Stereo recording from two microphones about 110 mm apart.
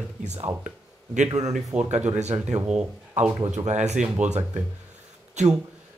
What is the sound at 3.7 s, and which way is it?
Speech, 90° right.